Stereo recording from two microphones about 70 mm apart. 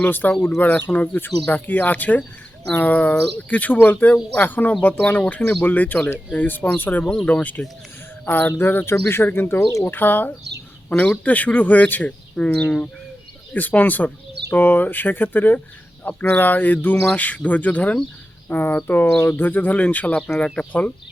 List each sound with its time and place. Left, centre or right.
0.0 s speech: left
7.0 s speech: centre
7.3 s speech: left
10.8 s speech: centre